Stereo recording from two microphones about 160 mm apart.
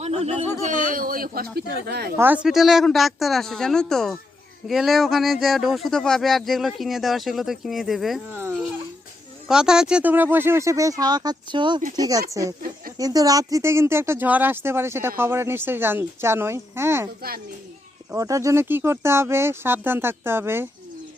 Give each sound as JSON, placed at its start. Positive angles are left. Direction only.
{"t": 0.0, "sound": "speech", "side_deg": -40}
{"t": 0.6, "sound": "speech", "side_deg": -55}
{"t": 1.5, "sound": "speech", "side_deg": -75}
{"t": 2.1, "sound": "speech", "side_deg": -10}
{"t": 8.3, "sound": "speech", "side_deg": -15}
{"t": 9.5, "sound": "speech", "side_deg": -5}
{"t": 18.1, "sound": "speech", "side_deg": -20}